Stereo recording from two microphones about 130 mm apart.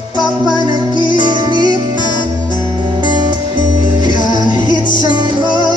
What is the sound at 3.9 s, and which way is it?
Music, 30° right (ahead or behind).